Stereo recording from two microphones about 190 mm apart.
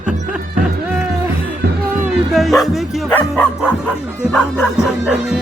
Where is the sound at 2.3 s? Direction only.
Centre (ahead or behind).